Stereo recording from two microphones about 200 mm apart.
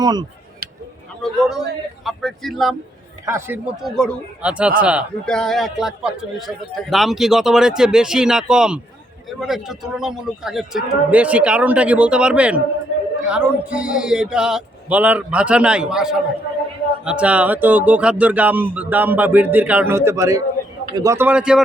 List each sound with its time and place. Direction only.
0.0 s speech: 20° right (ahead or behind)
1.2 s a man's voice: centre (ahead or behind)
3.2 s speech: 15° right (ahead or behind)
3.8 s a man's voice: centre (ahead or behind)